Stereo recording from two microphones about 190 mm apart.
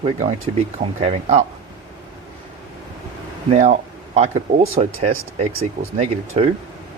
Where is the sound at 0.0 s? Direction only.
35° right (ahead or behind).